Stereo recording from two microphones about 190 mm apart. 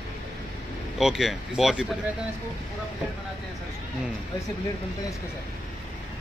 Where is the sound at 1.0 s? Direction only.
Centre (ahead or behind).